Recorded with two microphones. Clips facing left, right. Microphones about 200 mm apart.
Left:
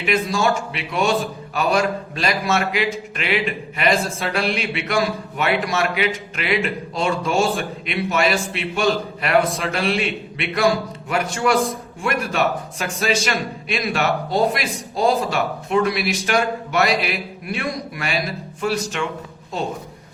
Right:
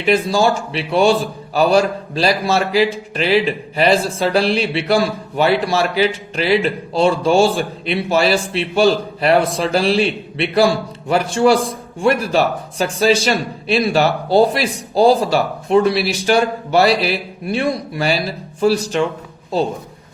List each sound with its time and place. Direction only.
0.0 s a man's voice: 30° right (ahead or behind)